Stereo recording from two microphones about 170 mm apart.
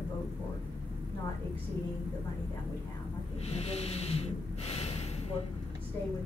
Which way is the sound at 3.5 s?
40° left (ahead or behind).